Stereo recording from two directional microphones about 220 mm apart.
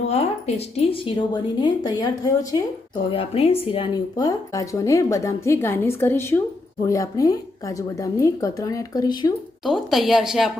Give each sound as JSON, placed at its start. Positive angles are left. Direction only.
{"t": 0.1, "sound": "a woman's voice", "side_deg": 30}
{"t": 9.6, "sound": "speech", "side_deg": 0}